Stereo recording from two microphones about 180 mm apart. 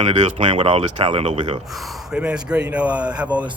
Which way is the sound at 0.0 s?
35° right (ahead or behind).